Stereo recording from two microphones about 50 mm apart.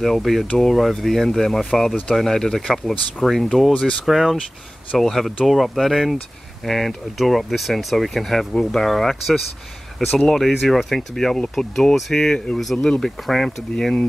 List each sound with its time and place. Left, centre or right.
0.0 s speech: centre
3.7 s speech: left
4.0 s speech: centre